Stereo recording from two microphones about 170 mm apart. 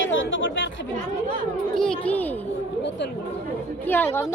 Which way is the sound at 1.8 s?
5° left (ahead or behind).